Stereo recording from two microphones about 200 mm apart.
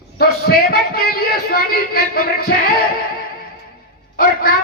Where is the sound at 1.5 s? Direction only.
50° left (ahead or behind).